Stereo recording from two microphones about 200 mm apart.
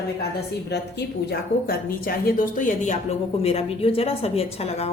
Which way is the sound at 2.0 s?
45° left (ahead or behind).